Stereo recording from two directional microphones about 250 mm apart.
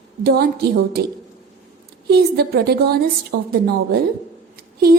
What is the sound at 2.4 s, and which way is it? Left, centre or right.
A woman's voice, right.